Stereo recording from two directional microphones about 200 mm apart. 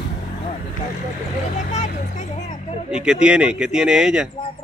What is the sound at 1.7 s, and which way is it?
Speech, 35° left (ahead or behind).